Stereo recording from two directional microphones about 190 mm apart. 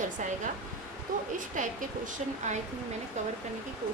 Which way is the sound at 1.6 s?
45° right (ahead or behind).